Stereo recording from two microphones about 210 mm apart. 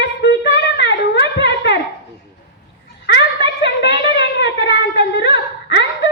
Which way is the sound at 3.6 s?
60° left (ahead or behind).